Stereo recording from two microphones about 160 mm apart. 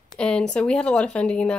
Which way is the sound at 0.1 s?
5° left (ahead or behind).